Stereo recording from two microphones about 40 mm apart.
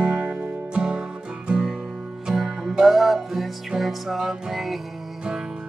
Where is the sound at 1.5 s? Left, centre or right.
Right.